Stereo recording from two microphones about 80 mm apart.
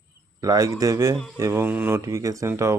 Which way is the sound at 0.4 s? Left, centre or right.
Right.